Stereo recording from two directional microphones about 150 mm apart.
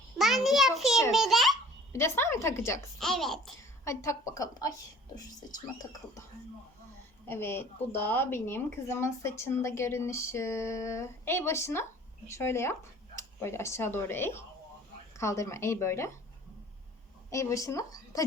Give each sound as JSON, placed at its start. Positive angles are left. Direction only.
{"t": 0.2, "sound": "a sound", "side_deg": 0}
{"t": 1.1, "sound": "a child's voice", "side_deg": 0}
{"t": 1.9, "sound": "a woman's voice", "side_deg": 20}
{"t": 3.0, "sound": "a child's voice", "side_deg": 0}
{"t": 3.8, "sound": "speech", "side_deg": 20}
{"t": 7.3, "sound": "a woman's voice", "side_deg": 15}
{"t": 17.3, "sound": "speech", "side_deg": 20}